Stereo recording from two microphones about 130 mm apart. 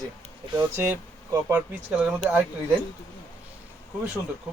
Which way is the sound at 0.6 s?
15° right (ahead or behind).